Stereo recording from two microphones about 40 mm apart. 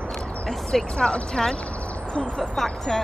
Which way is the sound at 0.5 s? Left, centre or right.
Centre.